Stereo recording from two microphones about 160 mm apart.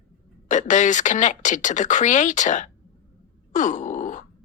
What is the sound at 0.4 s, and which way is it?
Speech, 50° left (ahead or behind).